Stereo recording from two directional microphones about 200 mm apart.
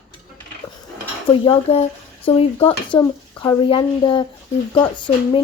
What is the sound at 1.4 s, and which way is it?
Speech, 30° left (ahead or behind).